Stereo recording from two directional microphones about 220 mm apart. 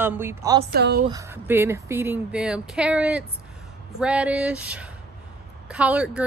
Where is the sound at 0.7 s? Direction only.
45° right (ahead or behind).